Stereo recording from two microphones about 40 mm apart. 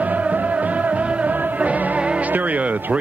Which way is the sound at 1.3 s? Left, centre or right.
Right.